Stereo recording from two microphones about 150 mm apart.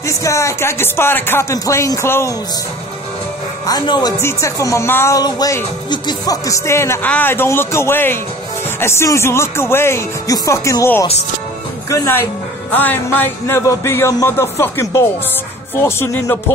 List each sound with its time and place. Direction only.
0.0 s speech: 20° left (ahead or behind)
3.6 s speech: 30° left (ahead or behind)